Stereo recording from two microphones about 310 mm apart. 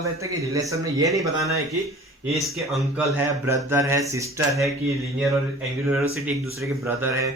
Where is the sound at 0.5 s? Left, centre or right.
Centre.